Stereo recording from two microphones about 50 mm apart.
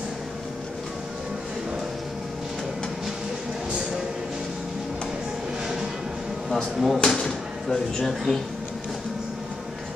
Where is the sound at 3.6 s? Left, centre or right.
Right.